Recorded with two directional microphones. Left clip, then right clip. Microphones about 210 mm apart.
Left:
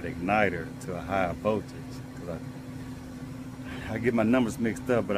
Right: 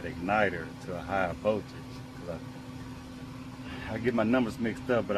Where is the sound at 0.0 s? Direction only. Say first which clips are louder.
Left 2 dB; 25° left (ahead or behind).